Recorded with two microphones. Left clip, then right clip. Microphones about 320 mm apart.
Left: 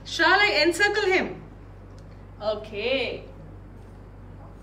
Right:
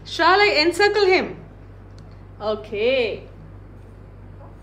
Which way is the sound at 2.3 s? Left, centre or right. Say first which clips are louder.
Right 4 dB; right.